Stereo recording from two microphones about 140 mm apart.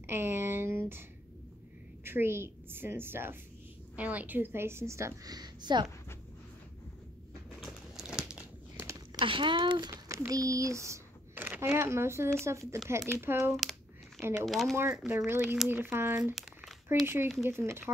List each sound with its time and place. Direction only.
0.0 s a sound: 15° right (ahead or behind)
2.0 s a woman's voice: 15° right (ahead or behind); by 5.9 s 30° right (ahead or behind)
7.6 s crumpling: 5° right (ahead or behind)
8.7 s a sound: 20° right (ahead or behind)
9.2 s a woman's voice: 35° right (ahead or behind); by 13.6 s 15° right (ahead or behind)
13.6 s a sound: centre (ahead or behind)
14.4 s speech: centre (ahead or behind)
14.8 s a woman's voice: 15° right (ahead or behind)
15.4 s speech: centre (ahead or behind)
15.7 s a woman's voice: 15° right (ahead or behind)
16.3 s crumpling: centre (ahead or behind)
17.0 s a woman's voice: 15° right (ahead or behind)